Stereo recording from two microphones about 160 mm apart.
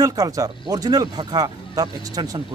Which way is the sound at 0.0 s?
20° right (ahead or behind).